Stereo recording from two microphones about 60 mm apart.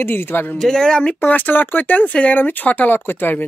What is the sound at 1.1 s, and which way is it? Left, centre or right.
A man's voice, left.